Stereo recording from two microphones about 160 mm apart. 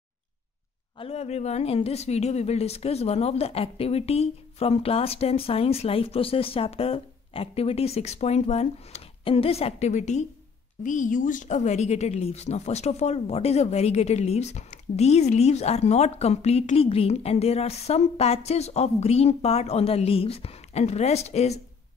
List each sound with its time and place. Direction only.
0.9 s speech: 40° left (ahead or behind)